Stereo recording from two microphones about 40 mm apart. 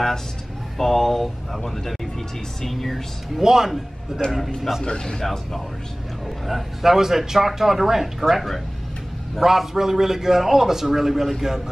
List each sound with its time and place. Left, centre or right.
0.7 s speech: centre
2.7 s speech: centre
3.4 s a man's voice: centre
4.2 s a man's voice: left
6.2 s a man's voice: centre